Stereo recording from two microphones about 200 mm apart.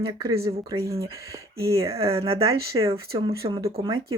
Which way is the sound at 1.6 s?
15° right (ahead or behind).